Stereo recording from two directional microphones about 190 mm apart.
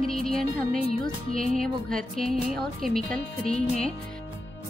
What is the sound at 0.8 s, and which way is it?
Music, 35° left (ahead or behind).